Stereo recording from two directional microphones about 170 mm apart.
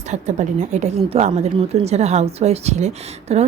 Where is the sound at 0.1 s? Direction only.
45° right (ahead or behind).